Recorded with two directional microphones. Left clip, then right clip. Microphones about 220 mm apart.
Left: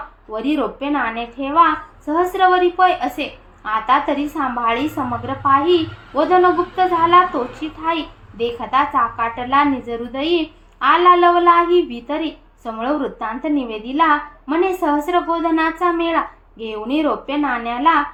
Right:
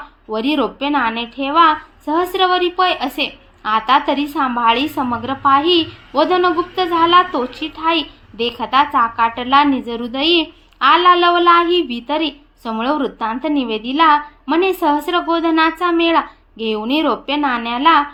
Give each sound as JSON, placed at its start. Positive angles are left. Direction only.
{"t": 0.3, "sound": "a woman's voice", "side_deg": -45}